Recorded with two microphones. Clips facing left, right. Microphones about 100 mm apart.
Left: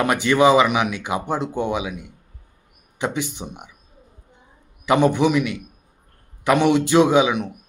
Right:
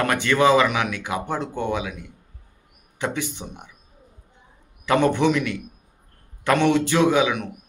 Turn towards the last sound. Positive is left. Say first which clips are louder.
# left 3 dB
turn(degrees=20)  # may be behind; listen again after turning